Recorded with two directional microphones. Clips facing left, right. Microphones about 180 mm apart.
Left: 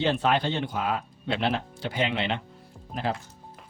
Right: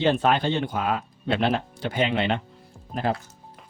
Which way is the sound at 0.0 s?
50° right (ahead or behind).